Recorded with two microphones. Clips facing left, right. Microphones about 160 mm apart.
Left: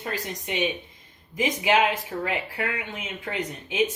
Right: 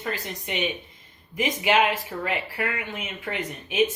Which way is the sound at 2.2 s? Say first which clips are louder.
Right 2 dB; 20° left (ahead or behind).